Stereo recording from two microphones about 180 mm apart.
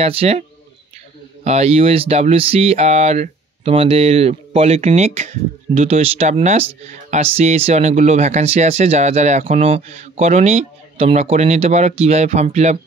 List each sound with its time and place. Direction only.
0.0 s speech: 35° right (ahead or behind)